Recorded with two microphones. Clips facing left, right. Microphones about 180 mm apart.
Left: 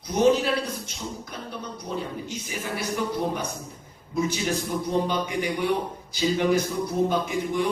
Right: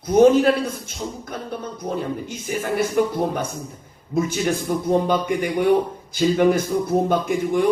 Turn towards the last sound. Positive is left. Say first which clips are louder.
# right 5 dB
turn(degrees=-50)  # may be behind; listen again after turning